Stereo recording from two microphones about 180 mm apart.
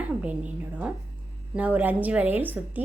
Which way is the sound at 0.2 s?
10° right (ahead or behind).